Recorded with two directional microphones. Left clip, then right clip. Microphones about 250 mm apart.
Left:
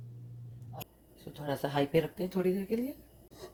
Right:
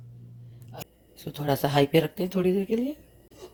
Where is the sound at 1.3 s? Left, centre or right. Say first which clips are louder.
Right 9 dB; right.